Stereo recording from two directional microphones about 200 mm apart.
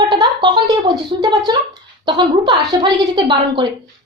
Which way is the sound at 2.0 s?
20° right (ahead or behind).